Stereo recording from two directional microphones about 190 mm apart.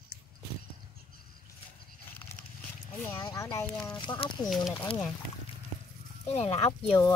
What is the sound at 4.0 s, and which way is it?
Speech, 25° left (ahead or behind).